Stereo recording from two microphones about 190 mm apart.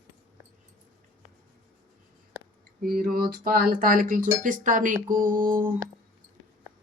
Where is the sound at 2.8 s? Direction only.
50° right (ahead or behind).